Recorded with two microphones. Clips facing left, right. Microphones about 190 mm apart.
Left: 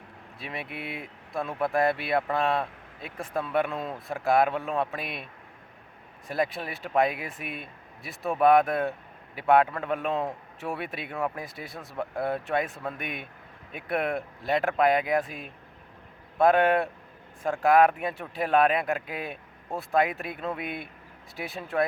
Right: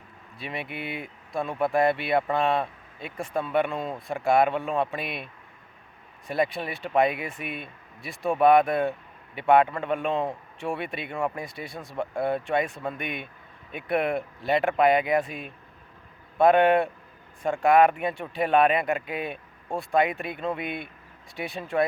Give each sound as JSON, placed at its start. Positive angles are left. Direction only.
{"t": 0.3, "sound": "speech", "side_deg": 0}